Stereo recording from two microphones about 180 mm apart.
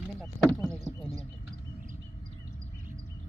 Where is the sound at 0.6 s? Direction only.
20° right (ahead or behind).